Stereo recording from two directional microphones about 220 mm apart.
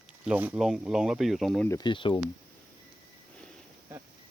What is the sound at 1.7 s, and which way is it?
Speech, 20° left (ahead or behind).